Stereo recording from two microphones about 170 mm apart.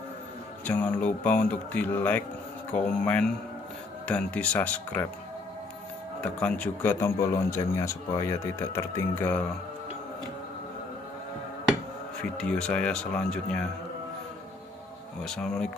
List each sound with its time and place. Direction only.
0.7 s a man's voice: 10° left (ahead or behind)
6.2 s a man's voice: 5° left (ahead or behind)
12.2 s speech: 5° left (ahead or behind)
15.2 s speech: 5° left (ahead or behind)